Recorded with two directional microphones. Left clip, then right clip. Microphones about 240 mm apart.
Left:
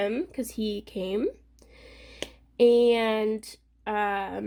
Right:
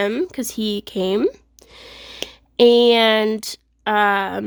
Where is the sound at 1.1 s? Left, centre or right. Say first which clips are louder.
Right 8 dB; right.